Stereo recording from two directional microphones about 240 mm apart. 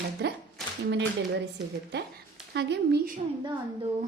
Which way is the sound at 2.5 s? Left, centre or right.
Right.